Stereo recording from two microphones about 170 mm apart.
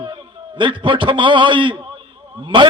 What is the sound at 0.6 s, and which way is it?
A man's voice, 30° right (ahead or behind).